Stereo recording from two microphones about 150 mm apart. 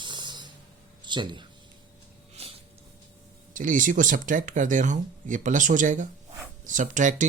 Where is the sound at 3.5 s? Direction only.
60° right (ahead or behind).